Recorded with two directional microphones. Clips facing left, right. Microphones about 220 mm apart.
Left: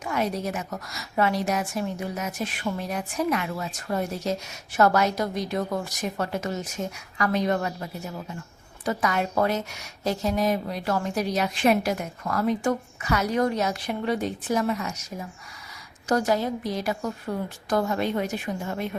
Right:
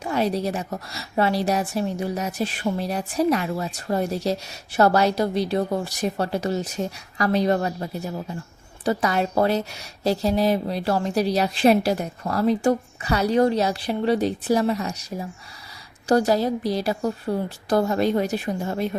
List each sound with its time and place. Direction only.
0.0 s a woman's voice: 30° right (ahead or behind)
16.0 s a woman's voice: 35° right (ahead or behind)